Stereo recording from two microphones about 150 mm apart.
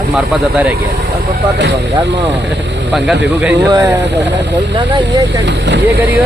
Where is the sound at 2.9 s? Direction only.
5° right (ahead or behind).